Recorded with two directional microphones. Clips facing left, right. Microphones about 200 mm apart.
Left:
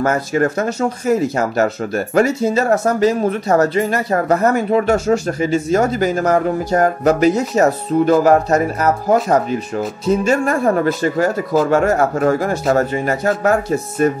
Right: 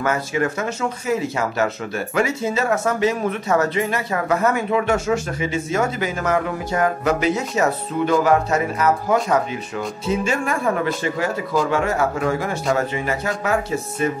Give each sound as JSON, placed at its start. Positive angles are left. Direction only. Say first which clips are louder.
{"t": 0.0, "sound": "speech", "louder": "left 5 dB", "side_deg": 45}